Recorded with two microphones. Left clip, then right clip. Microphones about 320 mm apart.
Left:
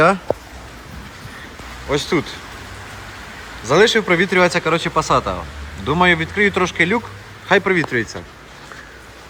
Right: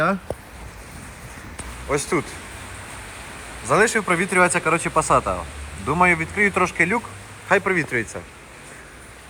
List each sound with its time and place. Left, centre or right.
1.9 s speech: centre
3.7 s speech: centre